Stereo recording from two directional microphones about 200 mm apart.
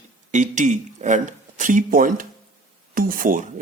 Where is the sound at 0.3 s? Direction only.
35° right (ahead or behind).